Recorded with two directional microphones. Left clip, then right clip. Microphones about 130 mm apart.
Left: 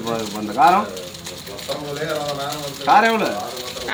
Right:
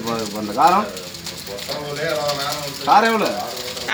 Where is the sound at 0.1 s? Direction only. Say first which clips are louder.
Even; 5° left (ahead or behind).